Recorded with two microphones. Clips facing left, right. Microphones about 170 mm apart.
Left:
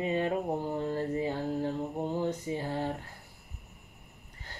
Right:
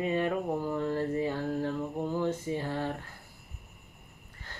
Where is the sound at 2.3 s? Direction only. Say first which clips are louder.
Right 1 dB; 20° left (ahead or behind).